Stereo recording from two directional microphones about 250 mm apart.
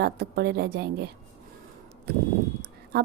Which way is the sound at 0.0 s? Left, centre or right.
Right.